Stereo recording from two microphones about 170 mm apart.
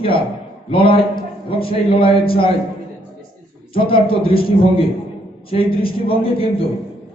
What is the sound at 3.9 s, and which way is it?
Speech, 30° left (ahead or behind).